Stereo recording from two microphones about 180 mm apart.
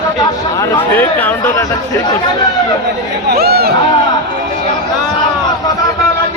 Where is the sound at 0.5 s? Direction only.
15° left (ahead or behind).